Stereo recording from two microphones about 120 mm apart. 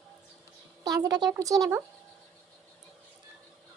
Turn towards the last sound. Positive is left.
turn(degrees=-30)  # may be behind; listen again after turning